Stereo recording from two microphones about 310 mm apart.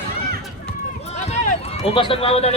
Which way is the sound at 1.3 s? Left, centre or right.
Centre.